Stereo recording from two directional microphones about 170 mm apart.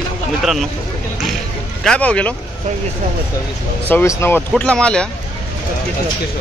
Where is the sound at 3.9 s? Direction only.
15° left (ahead or behind).